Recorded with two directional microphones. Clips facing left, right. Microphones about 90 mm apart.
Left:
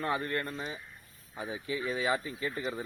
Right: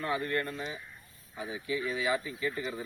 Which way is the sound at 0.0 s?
35° left (ahead or behind).